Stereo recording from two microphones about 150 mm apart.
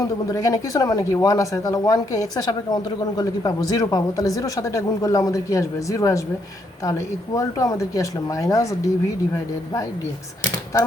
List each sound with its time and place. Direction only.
0.0 s speech: 25° left (ahead or behind)